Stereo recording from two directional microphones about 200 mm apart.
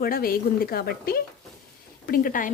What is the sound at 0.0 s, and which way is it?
A woman's voice, 45° left (ahead or behind).